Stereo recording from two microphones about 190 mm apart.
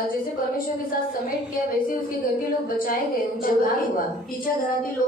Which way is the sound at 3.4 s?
45° left (ahead or behind).